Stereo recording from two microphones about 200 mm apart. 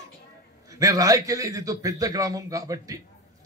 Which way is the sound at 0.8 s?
15° right (ahead or behind).